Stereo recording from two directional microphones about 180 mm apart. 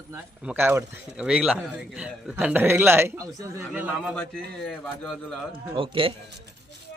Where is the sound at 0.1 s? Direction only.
10° right (ahead or behind).